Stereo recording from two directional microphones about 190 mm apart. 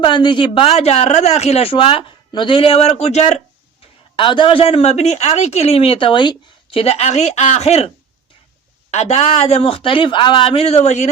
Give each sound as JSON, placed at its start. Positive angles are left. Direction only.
{"t": 0.0, "sound": "speech", "side_deg": 25}
{"t": 8.9, "sound": "speech", "side_deg": 35}